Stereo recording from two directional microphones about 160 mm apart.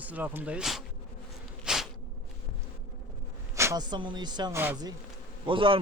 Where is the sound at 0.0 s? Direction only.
10° right (ahead or behind).